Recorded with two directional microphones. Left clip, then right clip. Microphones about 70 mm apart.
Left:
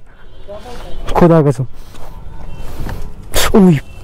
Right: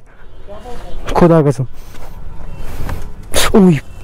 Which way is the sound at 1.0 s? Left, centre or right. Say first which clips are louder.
Even; centre.